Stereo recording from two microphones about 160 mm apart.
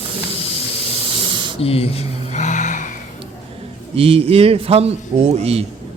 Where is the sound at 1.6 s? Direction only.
40° left (ahead or behind).